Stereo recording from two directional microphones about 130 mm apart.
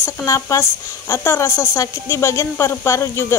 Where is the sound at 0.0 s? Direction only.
25° left (ahead or behind).